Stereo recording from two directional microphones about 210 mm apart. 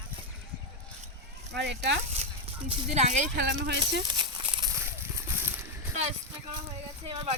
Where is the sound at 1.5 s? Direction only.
55° right (ahead or behind).